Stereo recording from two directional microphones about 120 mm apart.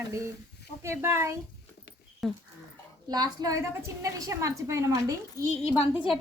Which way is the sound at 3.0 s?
35° right (ahead or behind).